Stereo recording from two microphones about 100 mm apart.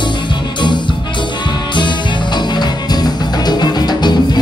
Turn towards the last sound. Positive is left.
turn(degrees=45)  # may be behind; listen again after turning